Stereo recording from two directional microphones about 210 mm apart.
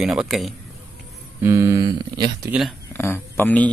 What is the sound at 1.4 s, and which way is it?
Speech, 15° right (ahead or behind).